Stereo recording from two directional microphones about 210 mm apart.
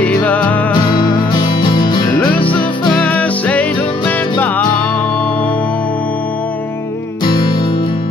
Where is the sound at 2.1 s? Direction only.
5° left (ahead or behind).